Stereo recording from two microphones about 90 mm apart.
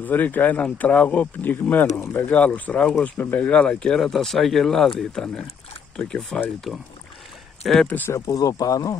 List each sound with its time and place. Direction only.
0.0 s speech: 20° left (ahead or behind); by 7.9 s 5° left (ahead or behind)
8.1 s speech: 40° left (ahead or behind)